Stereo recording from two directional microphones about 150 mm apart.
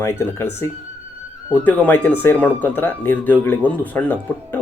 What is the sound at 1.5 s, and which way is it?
Speech, 10° left (ahead or behind).